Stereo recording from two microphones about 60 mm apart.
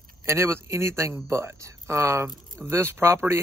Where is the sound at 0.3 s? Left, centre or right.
Right.